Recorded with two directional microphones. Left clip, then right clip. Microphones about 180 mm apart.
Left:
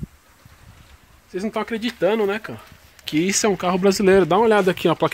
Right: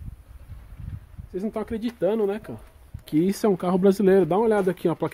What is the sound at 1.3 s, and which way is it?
Speech, 10° left (ahead or behind).